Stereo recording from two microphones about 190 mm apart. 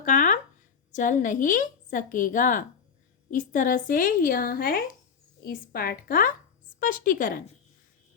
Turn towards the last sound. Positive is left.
turn(degrees=45)  # may be behind; listen again after turning